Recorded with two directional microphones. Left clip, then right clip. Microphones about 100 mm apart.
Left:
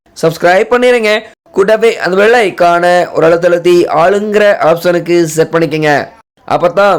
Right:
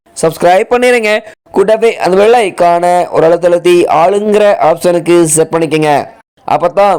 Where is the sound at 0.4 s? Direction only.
60° right (ahead or behind).